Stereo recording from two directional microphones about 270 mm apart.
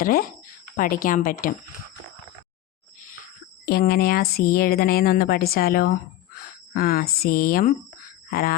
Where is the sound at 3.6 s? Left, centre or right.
Left.